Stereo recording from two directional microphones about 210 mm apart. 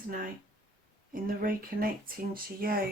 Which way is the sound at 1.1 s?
40° right (ahead or behind).